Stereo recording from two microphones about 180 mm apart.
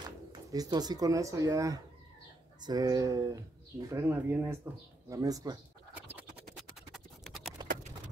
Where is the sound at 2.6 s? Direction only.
20° right (ahead or behind).